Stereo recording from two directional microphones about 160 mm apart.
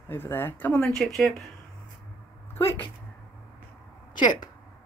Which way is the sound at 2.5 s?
15° left (ahead or behind).